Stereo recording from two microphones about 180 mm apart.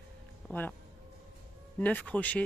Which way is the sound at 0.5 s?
10° left (ahead or behind).